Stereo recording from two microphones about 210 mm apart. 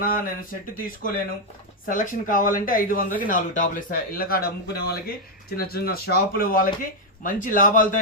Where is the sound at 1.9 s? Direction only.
40° left (ahead or behind).